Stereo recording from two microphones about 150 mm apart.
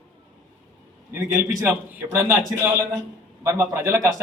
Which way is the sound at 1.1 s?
15° right (ahead or behind).